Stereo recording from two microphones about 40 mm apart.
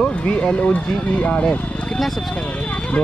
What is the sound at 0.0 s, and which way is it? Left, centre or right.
Speech, left.